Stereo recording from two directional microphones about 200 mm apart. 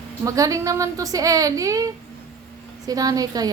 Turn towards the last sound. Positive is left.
turn(degrees=-20)  # may be behind; listen again after turning